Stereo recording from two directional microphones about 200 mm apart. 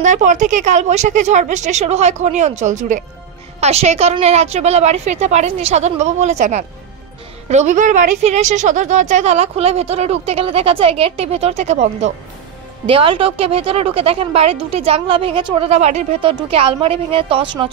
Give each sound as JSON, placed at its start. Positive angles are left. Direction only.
{"t": 0.0, "sound": "a woman's voice", "side_deg": -40}